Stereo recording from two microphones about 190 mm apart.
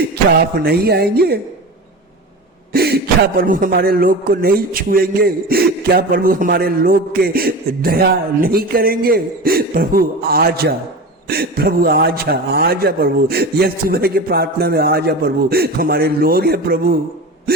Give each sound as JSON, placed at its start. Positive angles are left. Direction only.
{"t": 0.3, "sound": "a man's voice", "side_deg": -55}
{"t": 2.7, "sound": "a man's voice", "side_deg": -55}